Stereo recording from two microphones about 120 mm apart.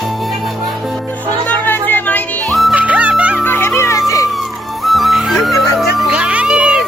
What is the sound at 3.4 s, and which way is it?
Music, 15° left (ahead or behind).